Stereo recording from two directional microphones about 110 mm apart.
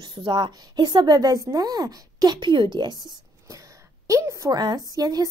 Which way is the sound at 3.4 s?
30° right (ahead or behind).